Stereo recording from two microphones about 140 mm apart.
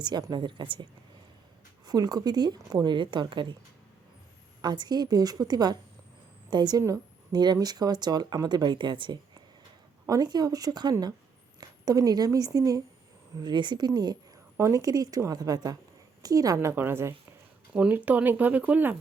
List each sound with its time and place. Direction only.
0.0 s a woman's voice: 30° right (ahead or behind)
1.9 s speech: 30° right (ahead or behind)
4.6 s a woman's voice: 30° right (ahead or behind); by 18.9 s 10° right (ahead or behind)